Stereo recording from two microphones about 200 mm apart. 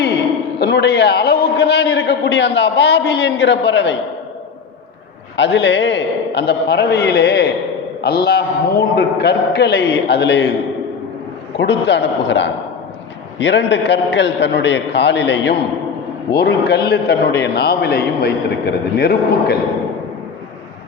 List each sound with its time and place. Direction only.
0.6 s a man's voice: 55° left (ahead or behind)
5.4 s a man's voice: 60° left (ahead or behind)
11.6 s a man's voice: 60° left (ahead or behind)